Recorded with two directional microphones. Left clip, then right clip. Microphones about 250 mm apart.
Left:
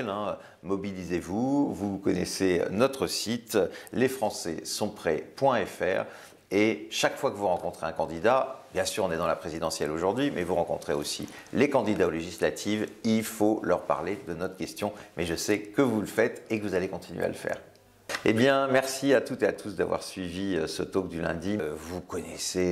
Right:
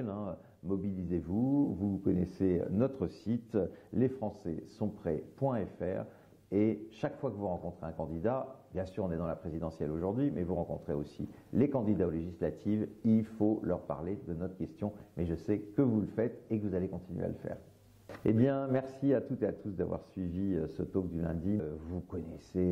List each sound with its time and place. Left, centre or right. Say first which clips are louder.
0.0 s speech: left 9 dB; centre
1.3 s speech: left 4 dB; left
2.0 s speech: left 6 dB; centre
22.4 s speech: left 7 dB; centre